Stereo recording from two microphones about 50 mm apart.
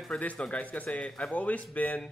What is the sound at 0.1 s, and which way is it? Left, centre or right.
Speech, left.